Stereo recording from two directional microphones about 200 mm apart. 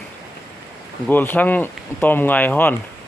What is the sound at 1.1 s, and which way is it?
Speech, 10° left (ahead or behind).